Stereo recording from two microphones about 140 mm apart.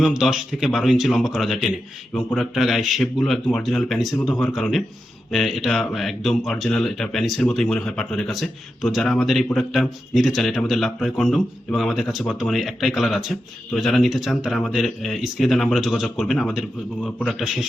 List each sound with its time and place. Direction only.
0.0 s a man's voice: 5° right (ahead or behind)